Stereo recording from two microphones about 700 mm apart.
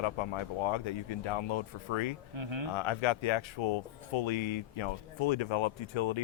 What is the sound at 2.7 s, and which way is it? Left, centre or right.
Speech, left.